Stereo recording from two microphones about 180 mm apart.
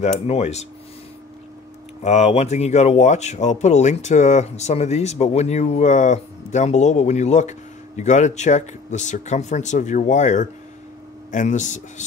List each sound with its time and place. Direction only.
0.0 s speech: 35° left (ahead or behind)
2.0 s speech: 35° left (ahead or behind)